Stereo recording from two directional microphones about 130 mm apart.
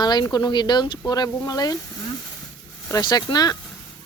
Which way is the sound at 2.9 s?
30° left (ahead or behind).